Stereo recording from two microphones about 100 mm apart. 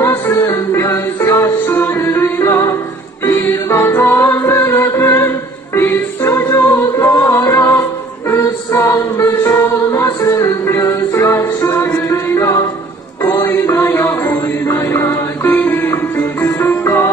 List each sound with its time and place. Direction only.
0.0 s music: 25° left (ahead or behind)
13.6 s mantra: 25° left (ahead or behind)
14.3 s music: 30° left (ahead or behind)